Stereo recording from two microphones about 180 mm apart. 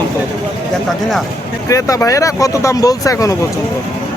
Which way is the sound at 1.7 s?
20° left (ahead or behind).